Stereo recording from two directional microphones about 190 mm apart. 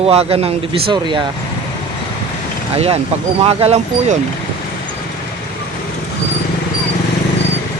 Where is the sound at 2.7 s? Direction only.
35° right (ahead or behind).